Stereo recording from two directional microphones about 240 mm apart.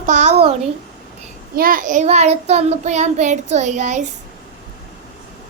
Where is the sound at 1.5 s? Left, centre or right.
Right.